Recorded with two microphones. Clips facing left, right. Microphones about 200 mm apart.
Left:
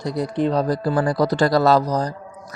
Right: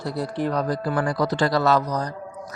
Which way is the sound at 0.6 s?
35° left (ahead or behind).